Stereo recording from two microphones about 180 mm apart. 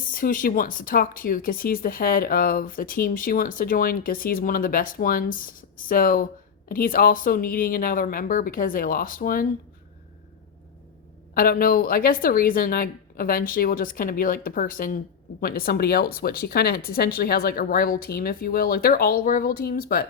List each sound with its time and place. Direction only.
0.0 s a woman's voice: 50° left (ahead or behind)
11.3 s a woman's voice: 50° left (ahead or behind)